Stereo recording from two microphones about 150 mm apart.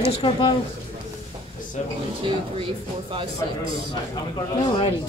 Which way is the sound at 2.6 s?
35° right (ahead or behind).